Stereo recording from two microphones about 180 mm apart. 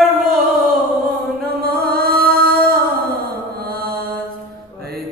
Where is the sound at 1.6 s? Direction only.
55° right (ahead or behind).